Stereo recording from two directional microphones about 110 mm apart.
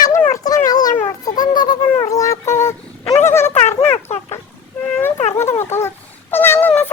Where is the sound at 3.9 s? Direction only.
70° left (ahead or behind).